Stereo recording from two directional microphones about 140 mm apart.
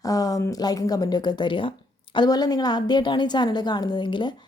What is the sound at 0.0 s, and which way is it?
A woman's voice, 25° left (ahead or behind).